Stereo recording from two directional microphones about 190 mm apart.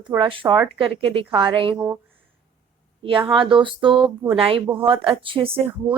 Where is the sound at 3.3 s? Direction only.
25° right (ahead or behind).